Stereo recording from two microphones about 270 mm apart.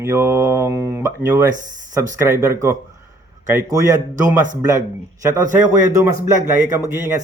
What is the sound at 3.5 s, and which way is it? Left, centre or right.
Mantra, centre.